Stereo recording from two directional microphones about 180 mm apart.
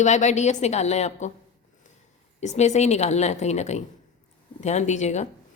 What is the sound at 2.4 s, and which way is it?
A woman's voice, 40° left (ahead or behind).